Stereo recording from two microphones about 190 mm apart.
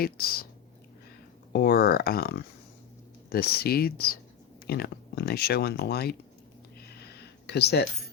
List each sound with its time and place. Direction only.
0.0 s speech: 55° left (ahead or behind)
1.5 s speech: 55° left (ahead or behind)
7.1 s a sound: 60° left (ahead or behind)